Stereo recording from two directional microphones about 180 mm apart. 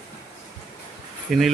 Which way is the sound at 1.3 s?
Centre (ahead or behind).